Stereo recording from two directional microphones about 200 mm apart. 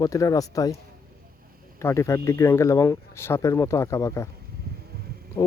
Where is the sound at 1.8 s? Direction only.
15° left (ahead or behind).